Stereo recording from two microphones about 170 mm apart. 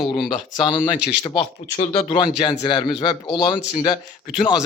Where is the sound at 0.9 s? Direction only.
10° right (ahead or behind).